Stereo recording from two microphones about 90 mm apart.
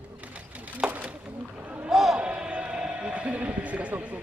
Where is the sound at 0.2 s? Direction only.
15° right (ahead or behind).